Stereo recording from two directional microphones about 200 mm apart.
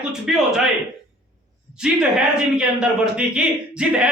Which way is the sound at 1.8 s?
5° right (ahead or behind).